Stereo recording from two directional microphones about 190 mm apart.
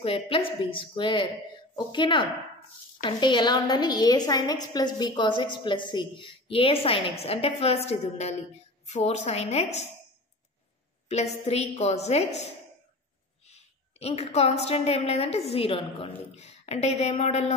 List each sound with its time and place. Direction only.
0.0 s a woman's voice: 30° left (ahead or behind)
11.4 s a woman's voice: 35° left (ahead or behind)
13.5 s a woman's voice: 35° left (ahead or behind)